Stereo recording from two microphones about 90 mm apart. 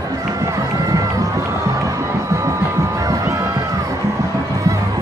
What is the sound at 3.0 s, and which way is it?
Music, 40° right (ahead or behind).